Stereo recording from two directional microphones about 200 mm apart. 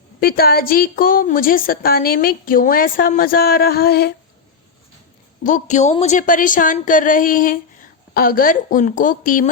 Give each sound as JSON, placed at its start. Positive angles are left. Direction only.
{"t": 0.2, "sound": "a woman's voice", "side_deg": 50}
{"t": 5.4, "sound": "a woman's voice", "side_deg": 40}